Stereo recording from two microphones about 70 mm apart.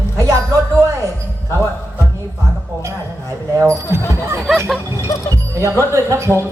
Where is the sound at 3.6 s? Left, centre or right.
Right.